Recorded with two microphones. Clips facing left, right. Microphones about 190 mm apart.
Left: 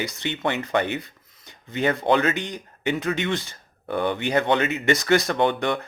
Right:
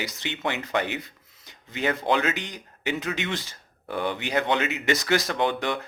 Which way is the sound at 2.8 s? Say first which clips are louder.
Left 4 dB; 5° right (ahead or behind).